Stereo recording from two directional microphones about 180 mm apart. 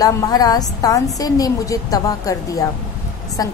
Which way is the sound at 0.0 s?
20° left (ahead or behind).